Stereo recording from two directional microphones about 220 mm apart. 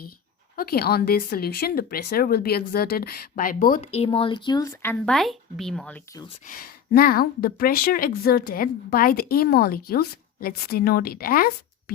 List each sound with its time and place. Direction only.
0.5 s speech: 40° left (ahead or behind)
3.8 s speech: 25° left (ahead or behind); by 6.0 s 5° left (ahead or behind)
6.4 s speech: 40° left (ahead or behind)